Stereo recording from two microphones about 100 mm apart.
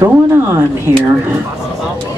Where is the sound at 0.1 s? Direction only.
20° right (ahead or behind).